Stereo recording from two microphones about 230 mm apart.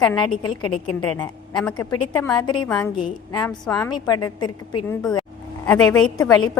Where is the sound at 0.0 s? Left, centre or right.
Centre.